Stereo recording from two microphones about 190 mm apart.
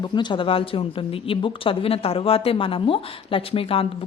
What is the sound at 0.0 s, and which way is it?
Speech, 25° left (ahead or behind).